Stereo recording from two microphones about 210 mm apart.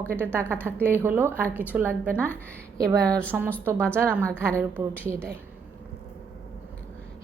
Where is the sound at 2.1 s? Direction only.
10° left (ahead or behind).